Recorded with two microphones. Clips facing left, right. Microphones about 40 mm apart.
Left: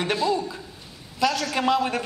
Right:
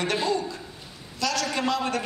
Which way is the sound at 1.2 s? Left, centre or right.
Centre.